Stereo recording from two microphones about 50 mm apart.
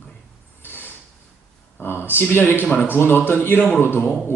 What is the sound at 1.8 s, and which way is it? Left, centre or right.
Speech, left.